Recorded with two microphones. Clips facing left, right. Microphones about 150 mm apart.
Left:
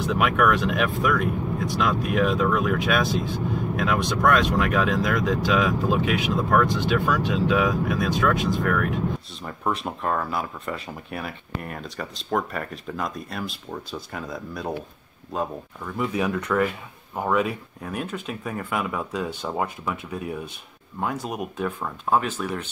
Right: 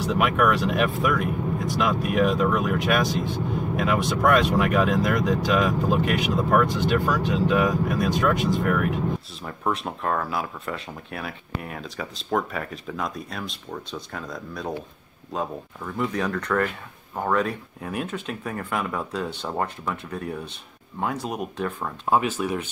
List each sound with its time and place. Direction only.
0.0 s speech: centre (ahead or behind)